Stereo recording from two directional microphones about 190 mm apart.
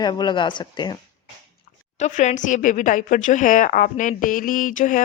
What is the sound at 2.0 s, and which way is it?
A woman's voice, 40° left (ahead or behind).